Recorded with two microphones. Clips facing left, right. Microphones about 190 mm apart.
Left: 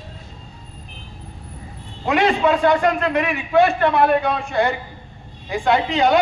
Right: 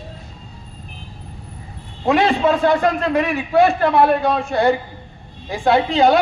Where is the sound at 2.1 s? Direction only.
30° right (ahead or behind).